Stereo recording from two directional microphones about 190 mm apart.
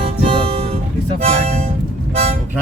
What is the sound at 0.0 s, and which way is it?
Music, 30° right (ahead or behind).